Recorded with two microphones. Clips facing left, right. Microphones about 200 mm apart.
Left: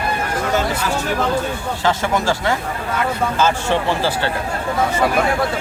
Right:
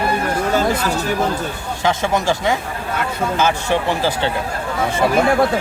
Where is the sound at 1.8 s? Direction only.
20° right (ahead or behind).